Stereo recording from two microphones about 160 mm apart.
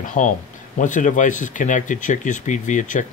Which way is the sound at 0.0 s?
55° left (ahead or behind).